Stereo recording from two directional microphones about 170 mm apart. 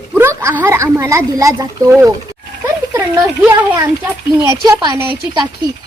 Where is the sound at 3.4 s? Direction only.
10° right (ahead or behind).